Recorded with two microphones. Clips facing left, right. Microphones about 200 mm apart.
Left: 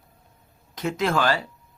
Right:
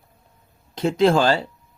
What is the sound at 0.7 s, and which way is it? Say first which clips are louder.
Speech: right 7 dB; 30° right (ahead or behind).